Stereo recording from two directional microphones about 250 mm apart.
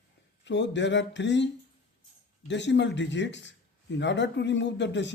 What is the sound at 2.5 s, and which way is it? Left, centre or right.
A man's voice, left.